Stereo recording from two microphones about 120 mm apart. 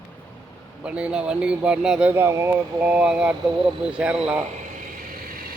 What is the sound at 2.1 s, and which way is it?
Speech, 20° right (ahead or behind).